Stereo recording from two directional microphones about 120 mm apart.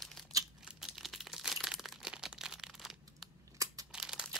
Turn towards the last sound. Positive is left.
turn(degrees=-5)  # may be behind; listen again after turning